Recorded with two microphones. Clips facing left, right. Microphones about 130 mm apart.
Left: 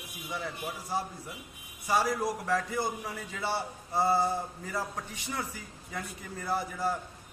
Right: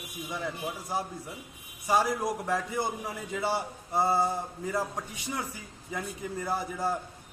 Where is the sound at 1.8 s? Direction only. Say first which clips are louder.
Right 2 dB; 20° right (ahead or behind).